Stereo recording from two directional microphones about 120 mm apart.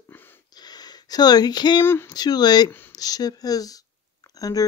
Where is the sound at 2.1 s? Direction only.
35° left (ahead or behind).